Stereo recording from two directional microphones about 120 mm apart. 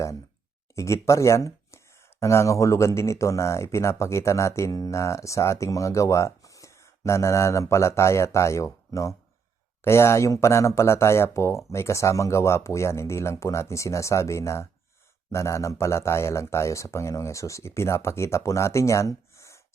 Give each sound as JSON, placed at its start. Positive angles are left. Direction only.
{"t": 1.0, "sound": "speech", "side_deg": 25}